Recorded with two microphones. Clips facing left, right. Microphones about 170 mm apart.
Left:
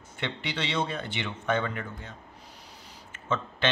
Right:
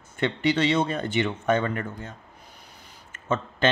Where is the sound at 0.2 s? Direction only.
45° right (ahead or behind).